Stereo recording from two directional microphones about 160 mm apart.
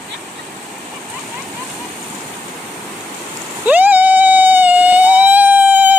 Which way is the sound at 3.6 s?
10° right (ahead or behind).